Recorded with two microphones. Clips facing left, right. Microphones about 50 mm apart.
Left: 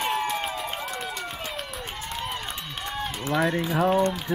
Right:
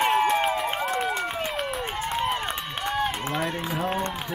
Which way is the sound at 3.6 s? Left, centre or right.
Centre.